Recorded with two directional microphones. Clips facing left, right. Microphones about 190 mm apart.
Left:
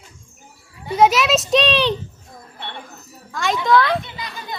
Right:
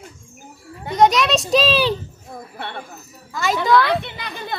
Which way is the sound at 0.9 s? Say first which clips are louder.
Even; 5° left (ahead or behind).